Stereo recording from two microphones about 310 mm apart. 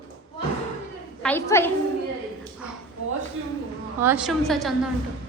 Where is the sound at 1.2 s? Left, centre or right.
Centre.